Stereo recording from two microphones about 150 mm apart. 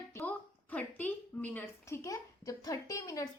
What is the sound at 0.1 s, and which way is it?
A woman's voice, 15° left (ahead or behind).